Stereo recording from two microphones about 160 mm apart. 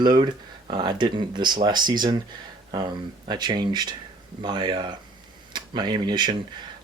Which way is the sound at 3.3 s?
25° right (ahead or behind).